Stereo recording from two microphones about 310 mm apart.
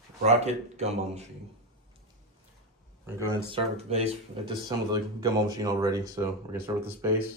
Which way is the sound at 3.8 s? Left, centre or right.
Centre.